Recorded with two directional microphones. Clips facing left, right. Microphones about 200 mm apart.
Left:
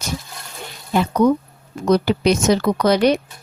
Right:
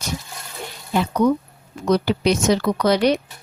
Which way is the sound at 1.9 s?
45° left (ahead or behind).